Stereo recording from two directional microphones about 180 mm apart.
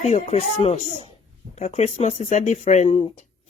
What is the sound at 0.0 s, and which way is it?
Speech, 35° left (ahead or behind).